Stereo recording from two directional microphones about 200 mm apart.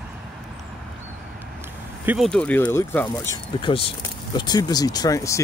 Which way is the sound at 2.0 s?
Centre (ahead or behind).